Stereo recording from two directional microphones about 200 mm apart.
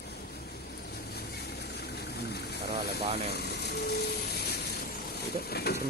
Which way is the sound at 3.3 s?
55° left (ahead or behind).